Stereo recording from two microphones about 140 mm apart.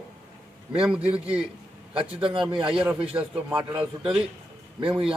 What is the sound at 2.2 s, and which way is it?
A man's voice, 40° right (ahead or behind).